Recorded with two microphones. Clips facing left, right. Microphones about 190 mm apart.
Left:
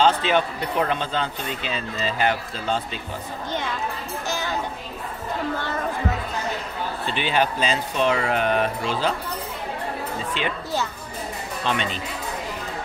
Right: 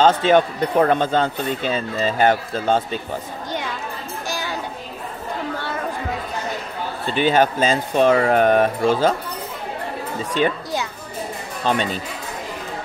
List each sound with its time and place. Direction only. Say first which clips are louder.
0.0 s speech: right 5 dB; 45° right (ahead or behind)
4.3 s a sound: even; 10° right (ahead or behind)
7.1 s speech: right 7 dB; 45° right (ahead or behind)
11.6 s speech: right 5 dB; 40° right (ahead or behind)